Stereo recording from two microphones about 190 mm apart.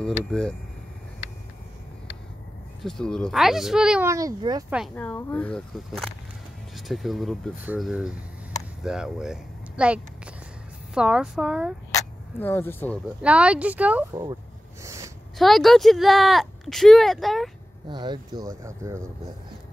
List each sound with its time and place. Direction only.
0.0 s speech: 5° left (ahead or behind)
2.8 s speech: 5° left (ahead or behind)
4.1 s speech: 15° right (ahead or behind)
4.6 s speech: 5° right (ahead or behind)
4.9 s speech: 10° left (ahead or behind)
11.9 s a sound: 10° left (ahead or behind)
13.2 s speech: 5° right (ahead or behind)
14.8 s a sound: 15° right (ahead or behind)
15.3 s speech: centre (ahead or behind)
17.8 s speech: 25° right (ahead or behind)